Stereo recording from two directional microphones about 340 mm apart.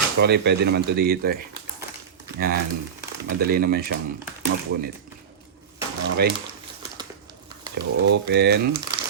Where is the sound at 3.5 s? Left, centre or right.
Right.